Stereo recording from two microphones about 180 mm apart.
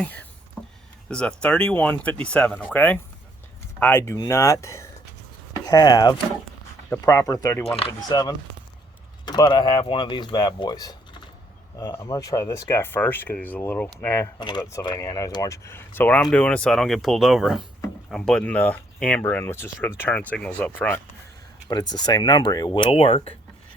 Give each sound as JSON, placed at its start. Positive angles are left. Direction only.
{"t": 0.0, "sound": "speech", "side_deg": 10}
{"t": 0.6, "sound": "a sound", "side_deg": 5}
{"t": 1.0, "sound": "speech", "side_deg": 5}
{"t": 14.3, "sound": "speech", "side_deg": 25}
{"t": 21.7, "sound": "speech", "side_deg": 25}